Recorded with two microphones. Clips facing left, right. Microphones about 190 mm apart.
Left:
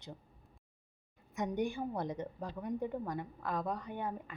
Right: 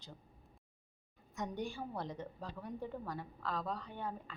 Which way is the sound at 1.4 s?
20° left (ahead or behind).